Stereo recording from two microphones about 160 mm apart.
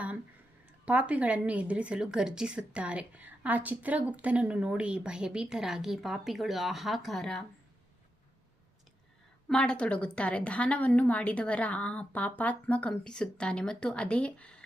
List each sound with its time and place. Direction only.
0.9 s a woman's voice: 10° right (ahead or behind)
9.5 s a woman's voice: 5° left (ahead or behind)